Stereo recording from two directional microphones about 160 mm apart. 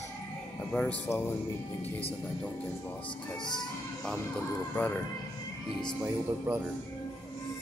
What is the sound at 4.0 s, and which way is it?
Speech, 5° left (ahead or behind).